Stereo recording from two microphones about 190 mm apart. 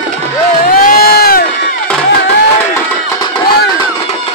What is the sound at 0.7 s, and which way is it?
Crowd, 50° left (ahead or behind).